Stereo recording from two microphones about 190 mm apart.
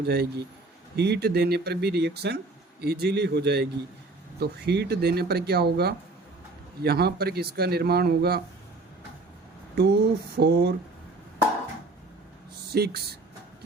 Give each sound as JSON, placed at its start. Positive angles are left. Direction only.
{"t": 0.0, "sound": "speech", "side_deg": -55}
{"t": 9.7, "sound": "speech", "side_deg": -60}
{"t": 12.7, "sound": "speech", "side_deg": -55}